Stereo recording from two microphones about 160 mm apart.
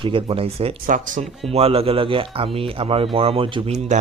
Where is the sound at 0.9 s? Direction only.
55° right (ahead or behind).